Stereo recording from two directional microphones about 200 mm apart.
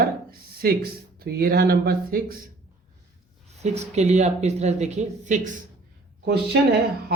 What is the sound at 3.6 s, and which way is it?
Speech, 35° right (ahead or behind).